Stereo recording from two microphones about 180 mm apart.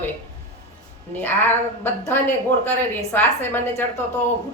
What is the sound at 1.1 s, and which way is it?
A woman's voice, 10° left (ahead or behind).